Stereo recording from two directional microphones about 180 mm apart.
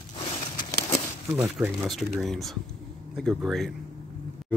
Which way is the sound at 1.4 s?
Centre (ahead or behind).